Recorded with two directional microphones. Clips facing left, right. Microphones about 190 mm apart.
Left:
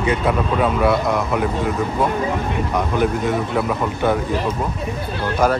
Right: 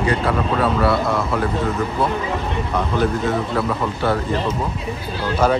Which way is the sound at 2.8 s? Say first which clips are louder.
Even; 15° left (ahead or behind).